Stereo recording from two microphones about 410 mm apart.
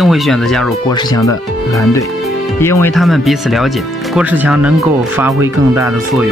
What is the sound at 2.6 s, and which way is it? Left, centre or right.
Speech, centre.